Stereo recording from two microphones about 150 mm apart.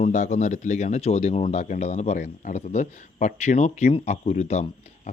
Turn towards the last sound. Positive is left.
turn(degrees=45)  # may be behind; listen again after turning